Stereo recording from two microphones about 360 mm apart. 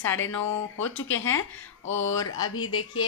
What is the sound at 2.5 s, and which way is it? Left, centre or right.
Speech, left.